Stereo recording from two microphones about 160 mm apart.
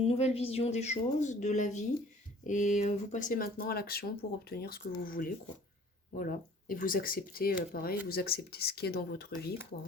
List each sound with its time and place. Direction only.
0.1 s a woman's voice: 40° left (ahead or behind); by 4.9 s 75° left (ahead or behind)
4.9 s speech: 60° left (ahead or behind); by 9.4 s 80° left